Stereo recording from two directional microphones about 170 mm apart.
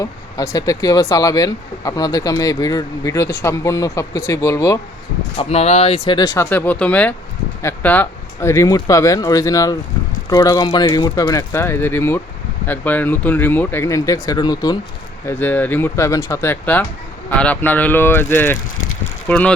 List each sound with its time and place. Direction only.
0.5 s speech: 20° left (ahead or behind)
5.4 s speech: 40° left (ahead or behind)
6.1 s speech: 20° left (ahead or behind)
15.3 s speech: 10° left (ahead or behind)